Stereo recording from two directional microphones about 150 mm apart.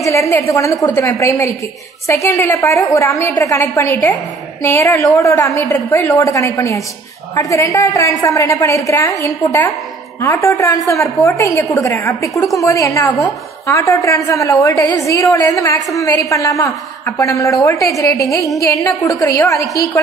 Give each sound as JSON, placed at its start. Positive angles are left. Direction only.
{"t": 0.0, "sound": "a woman's voice", "side_deg": 20}